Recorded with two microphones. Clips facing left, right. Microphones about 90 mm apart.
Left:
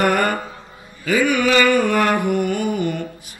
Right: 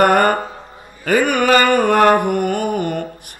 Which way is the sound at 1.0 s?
50° right (ahead or behind).